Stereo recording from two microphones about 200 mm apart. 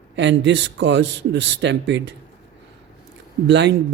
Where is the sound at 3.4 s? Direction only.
60° right (ahead or behind).